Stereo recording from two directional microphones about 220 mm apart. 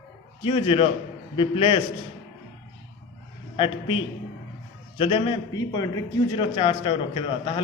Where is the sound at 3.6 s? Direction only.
25° left (ahead or behind).